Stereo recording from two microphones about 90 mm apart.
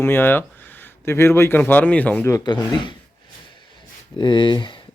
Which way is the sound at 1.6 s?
15° left (ahead or behind).